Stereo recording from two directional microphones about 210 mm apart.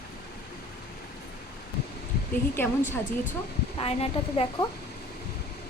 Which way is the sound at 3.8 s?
25° left (ahead or behind).